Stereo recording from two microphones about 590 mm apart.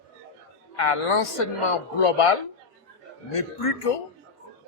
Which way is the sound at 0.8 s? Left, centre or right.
Left.